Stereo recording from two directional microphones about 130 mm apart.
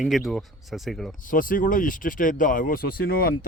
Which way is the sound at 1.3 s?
90° left.